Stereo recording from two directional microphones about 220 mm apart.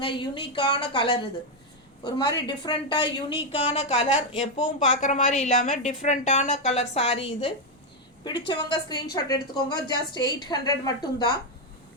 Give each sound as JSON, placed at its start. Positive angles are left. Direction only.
{"t": 0.0, "sound": "a woman's voice", "side_deg": 20}